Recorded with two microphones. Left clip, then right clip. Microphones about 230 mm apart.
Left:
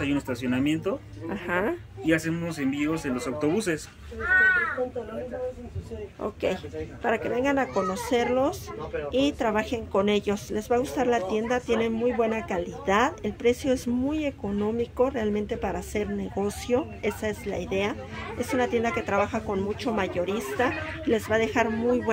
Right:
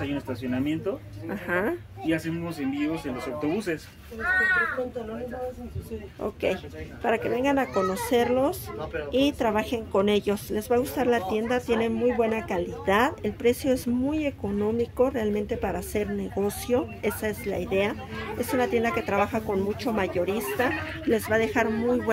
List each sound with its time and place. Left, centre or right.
0.0 s speech: left
1.3 s a woman's voice: centre
2.0 s a man's voice: left
6.2 s a woman's voice: centre